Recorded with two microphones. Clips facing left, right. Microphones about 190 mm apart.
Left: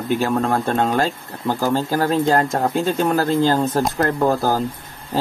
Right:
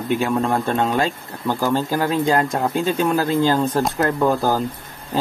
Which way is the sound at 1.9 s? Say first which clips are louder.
Left 2 dB; 45° left (ahead or behind).